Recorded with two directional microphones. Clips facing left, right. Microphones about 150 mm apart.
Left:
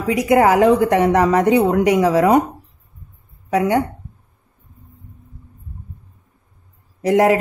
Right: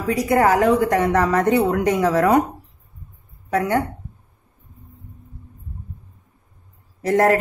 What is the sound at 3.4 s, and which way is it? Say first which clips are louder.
Speech: left 3 dB; 15° left (ahead or behind).